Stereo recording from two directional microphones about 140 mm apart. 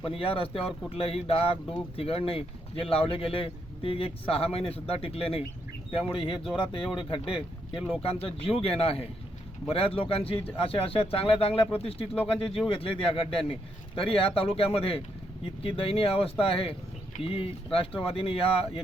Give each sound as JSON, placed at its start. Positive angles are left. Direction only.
{"t": 0.0, "sound": "speech", "side_deg": 40}